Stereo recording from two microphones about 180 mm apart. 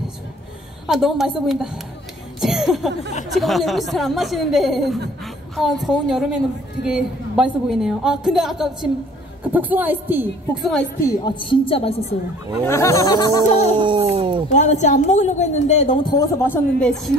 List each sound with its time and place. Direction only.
0.8 s a woman's voice: centre (ahead or behind)
2.4 s a sound: centre (ahead or behind)
3.3 s a woman's voice: centre (ahead or behind)
11.2 s a woman's voice: 30° left (ahead or behind)
12.6 s speech: 15° left (ahead or behind)
13.7 s a sound: 25° right (ahead or behind)
14.5 s a woman's voice: 40° left (ahead or behind)
16.2 s a man's voice: 15° left (ahead or behind)